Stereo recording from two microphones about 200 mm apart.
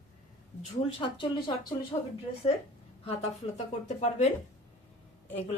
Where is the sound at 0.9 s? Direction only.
25° left (ahead or behind).